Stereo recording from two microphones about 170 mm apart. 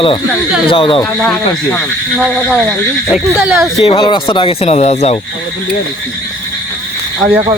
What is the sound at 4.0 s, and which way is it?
Speech, 25° left (ahead or behind).